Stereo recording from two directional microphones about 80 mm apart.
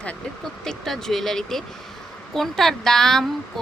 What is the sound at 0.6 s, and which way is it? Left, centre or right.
A woman's voice, centre.